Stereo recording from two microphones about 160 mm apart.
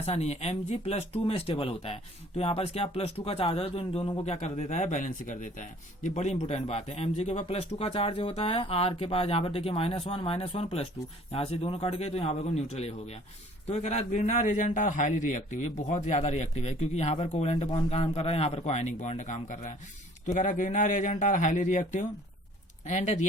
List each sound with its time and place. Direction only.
0.0 s a man's voice: 40° left (ahead or behind)